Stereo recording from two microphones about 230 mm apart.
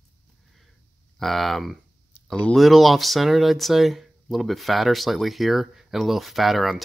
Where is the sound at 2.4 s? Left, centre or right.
Centre.